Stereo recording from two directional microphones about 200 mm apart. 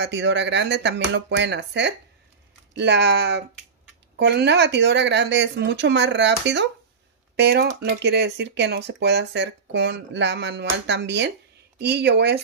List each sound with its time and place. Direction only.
0.0 s speech: 60° right (ahead or behind)